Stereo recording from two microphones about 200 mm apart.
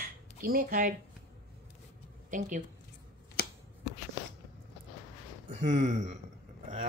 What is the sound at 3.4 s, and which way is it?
Shuffling cards, 50° left (ahead or behind).